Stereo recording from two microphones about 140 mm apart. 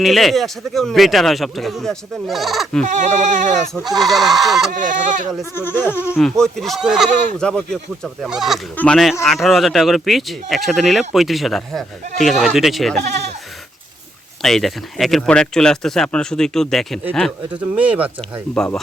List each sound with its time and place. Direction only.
0.0 s speech: centre (ahead or behind)
2.8 s bleat: 60° right (ahead or behind)
3.8 s speech: centre (ahead or behind)
4.9 s bleat: 65° right (ahead or behind)
5.5 s speech: 15° left (ahead or behind)
6.1 s speech: 5° left (ahead or behind)
8.7 s speech: 10° left (ahead or behind)
9.2 s speech: centre (ahead or behind)
13.0 s speech: 55° right (ahead or behind)
14.4 s speech: centre (ahead or behind)
17.5 s speech: 10° right (ahead or behind)
18.5 s speech: 5° left (ahead or behind)